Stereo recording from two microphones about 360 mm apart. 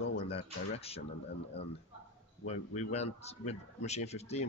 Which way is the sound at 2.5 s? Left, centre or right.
Centre.